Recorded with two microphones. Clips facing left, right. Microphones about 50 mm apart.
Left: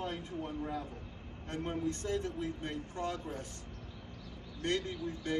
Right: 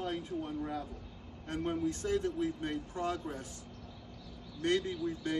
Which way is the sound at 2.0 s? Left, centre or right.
Centre.